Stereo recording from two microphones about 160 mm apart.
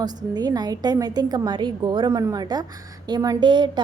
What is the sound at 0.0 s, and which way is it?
A woman's voice, 25° right (ahead or behind).